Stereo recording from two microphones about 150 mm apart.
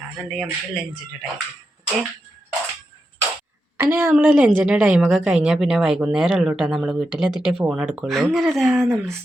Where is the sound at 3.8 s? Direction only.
15° right (ahead or behind); by 9.1 s centre (ahead or behind).